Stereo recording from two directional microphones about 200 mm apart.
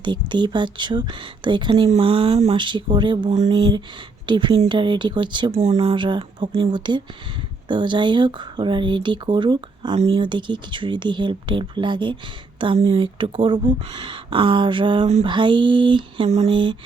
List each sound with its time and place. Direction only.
0.0 s speech: 25° right (ahead or behind)